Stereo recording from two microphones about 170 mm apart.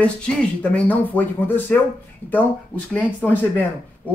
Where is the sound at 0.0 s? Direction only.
5° left (ahead or behind).